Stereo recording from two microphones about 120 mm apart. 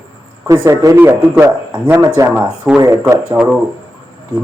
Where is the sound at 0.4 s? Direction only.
25° right (ahead or behind).